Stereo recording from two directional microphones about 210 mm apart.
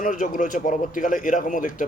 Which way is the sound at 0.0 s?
40° left (ahead or behind).